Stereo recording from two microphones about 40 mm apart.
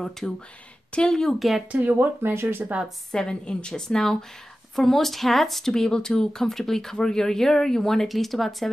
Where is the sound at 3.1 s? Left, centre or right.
Centre.